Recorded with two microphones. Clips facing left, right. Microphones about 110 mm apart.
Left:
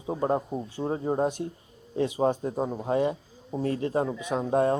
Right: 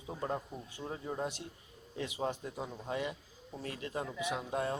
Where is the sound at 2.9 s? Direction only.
35° left (ahead or behind).